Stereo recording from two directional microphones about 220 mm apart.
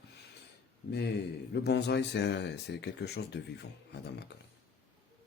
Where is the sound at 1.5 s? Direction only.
50° left (ahead or behind).